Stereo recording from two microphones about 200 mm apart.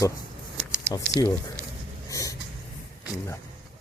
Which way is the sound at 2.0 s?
15° left (ahead or behind).